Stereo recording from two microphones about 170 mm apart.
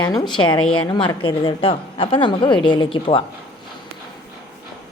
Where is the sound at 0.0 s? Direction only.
25° left (ahead or behind).